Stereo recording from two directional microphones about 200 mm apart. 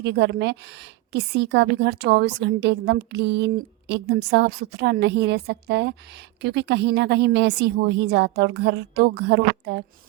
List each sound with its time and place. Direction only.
0.0 s a woman's voice: 60° right (ahead or behind)